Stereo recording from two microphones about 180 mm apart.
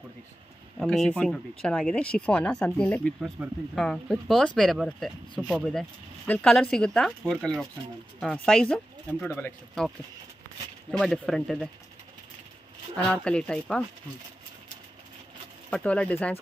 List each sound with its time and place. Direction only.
0.7 s speech: centre (ahead or behind)
10.9 s speech: centre (ahead or behind)
12.9 s speech: 5° left (ahead or behind)
15.7 s speech: 5° left (ahead or behind)